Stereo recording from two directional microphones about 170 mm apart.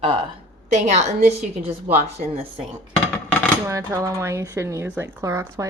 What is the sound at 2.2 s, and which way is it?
Speech, 50° right (ahead or behind).